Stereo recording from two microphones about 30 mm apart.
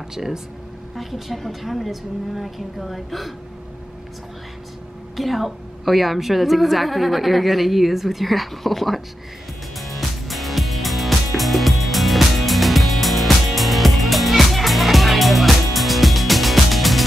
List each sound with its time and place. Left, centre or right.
0.1 s speech: centre
0.9 s a woman's voice: centre
5.1 s a woman's voice: centre
9.8 s music: centre